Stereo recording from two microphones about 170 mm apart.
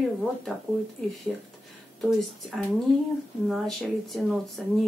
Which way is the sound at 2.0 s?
Centre (ahead or behind).